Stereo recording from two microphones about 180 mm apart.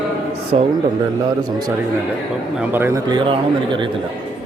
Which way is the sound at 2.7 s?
15° right (ahead or behind).